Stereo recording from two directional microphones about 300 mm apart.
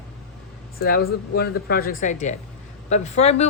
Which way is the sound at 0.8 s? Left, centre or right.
Left.